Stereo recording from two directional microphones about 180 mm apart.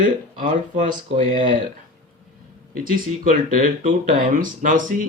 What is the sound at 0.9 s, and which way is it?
Speech, 30° right (ahead or behind).